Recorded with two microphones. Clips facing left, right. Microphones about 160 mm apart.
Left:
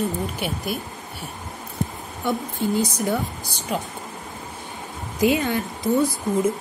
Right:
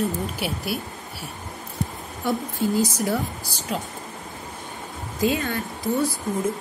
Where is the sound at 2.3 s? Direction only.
Centre (ahead or behind).